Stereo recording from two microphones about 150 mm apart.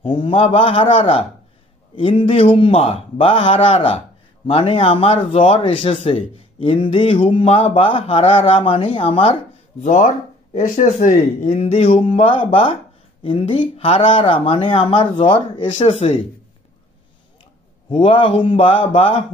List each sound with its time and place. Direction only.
0.0 s speech: 35° left (ahead or behind)
17.8 s speech: 35° left (ahead or behind)